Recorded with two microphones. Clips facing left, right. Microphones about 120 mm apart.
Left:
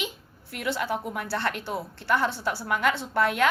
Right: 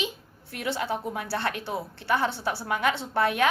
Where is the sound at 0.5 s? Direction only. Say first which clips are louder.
Left 1 dB; 25° right (ahead or behind).